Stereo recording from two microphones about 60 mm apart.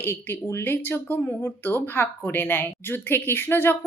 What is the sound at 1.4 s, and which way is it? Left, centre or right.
A woman's voice, left.